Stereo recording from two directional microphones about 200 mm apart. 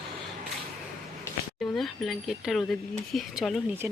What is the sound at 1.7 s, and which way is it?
Speech, centre (ahead or behind).